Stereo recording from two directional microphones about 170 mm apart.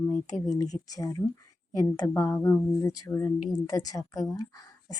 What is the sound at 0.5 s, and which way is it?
Speech, 20° left (ahead or behind).